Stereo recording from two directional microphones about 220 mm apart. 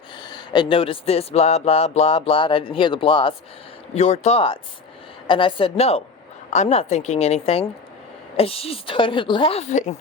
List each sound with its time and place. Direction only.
0.2 s speech: 20° left (ahead or behind)